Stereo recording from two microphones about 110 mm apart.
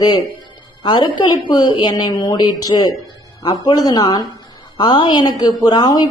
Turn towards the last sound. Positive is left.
turn(degrees=40)  # may be behind; listen again after turning